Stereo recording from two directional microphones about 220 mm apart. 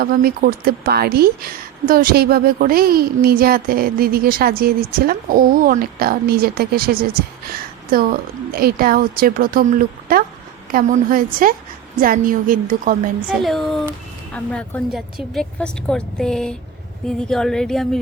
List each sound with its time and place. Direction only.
0.0 s a woman's voice: 45° right (ahead or behind)
13.2 s a woman's voice: centre (ahead or behind)